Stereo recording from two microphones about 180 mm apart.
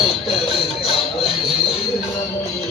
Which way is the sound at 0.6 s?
30° left (ahead or behind).